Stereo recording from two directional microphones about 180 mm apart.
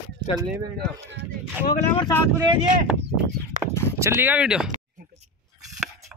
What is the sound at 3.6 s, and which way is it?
Speech, 45° right (ahead or behind).